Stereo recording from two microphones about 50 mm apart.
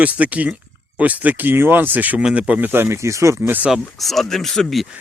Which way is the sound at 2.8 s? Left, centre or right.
Right.